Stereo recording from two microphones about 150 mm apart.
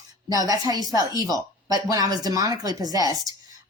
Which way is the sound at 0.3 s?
25° right (ahead or behind).